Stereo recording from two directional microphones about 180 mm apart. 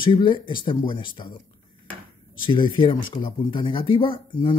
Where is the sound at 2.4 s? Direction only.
25° left (ahead or behind).